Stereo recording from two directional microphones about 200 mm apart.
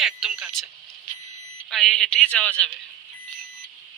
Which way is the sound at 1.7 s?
5° left (ahead or behind).